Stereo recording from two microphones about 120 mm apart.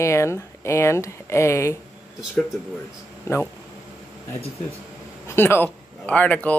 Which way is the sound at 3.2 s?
20° left (ahead or behind).